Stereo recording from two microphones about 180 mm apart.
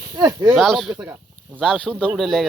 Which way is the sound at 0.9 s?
20° right (ahead or behind).